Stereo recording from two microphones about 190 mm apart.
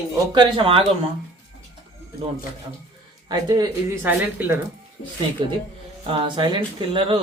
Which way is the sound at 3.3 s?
20° right (ahead or behind).